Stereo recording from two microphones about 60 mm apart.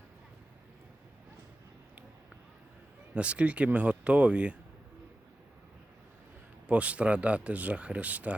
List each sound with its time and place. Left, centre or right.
3.2 s speech: right
6.7 s speech: right